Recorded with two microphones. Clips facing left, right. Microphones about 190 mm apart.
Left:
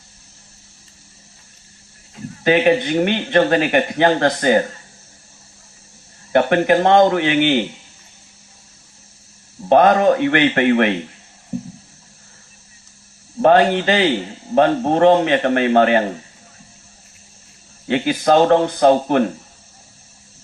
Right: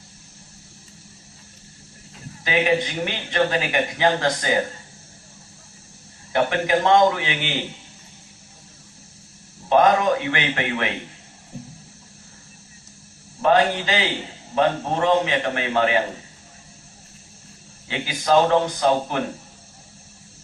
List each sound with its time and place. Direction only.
2.4 s speech: 55° left (ahead or behind)
6.3 s speech: 55° left (ahead or behind)
9.6 s speech: 55° left (ahead or behind)
13.4 s speech: 55° left (ahead or behind)
17.8 s speech: 55° left (ahead or behind)